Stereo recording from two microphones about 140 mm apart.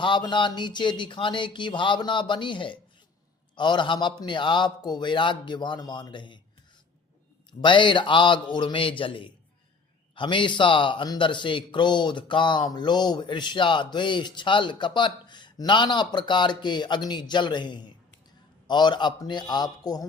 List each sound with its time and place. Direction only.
0.0 s a man's voice: 35° left (ahead or behind)
7.6 s a man's voice: 35° left (ahead or behind)